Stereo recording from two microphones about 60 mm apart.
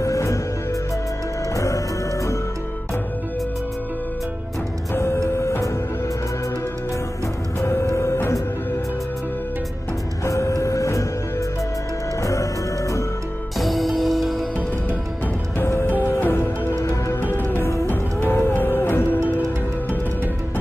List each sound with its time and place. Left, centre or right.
0.0 s music: left
1.5 s music: left
4.9 s music: left
7.6 s music: left
10.2 s music: left
13.6 s music: centre
16.1 s music: left